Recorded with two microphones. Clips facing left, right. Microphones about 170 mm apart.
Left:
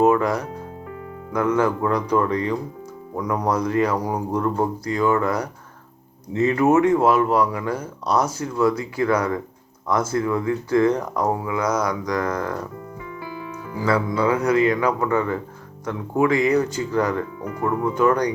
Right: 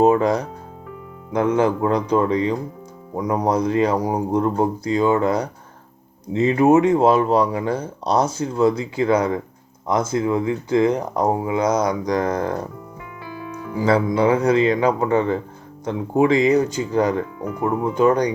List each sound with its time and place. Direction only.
0.0 s speech: 25° right (ahead or behind)
13.7 s speech: 20° right (ahead or behind)